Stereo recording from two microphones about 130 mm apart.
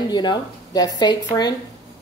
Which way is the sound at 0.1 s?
35° left (ahead or behind).